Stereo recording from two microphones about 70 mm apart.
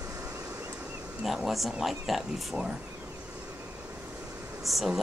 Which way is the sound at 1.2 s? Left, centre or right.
Centre.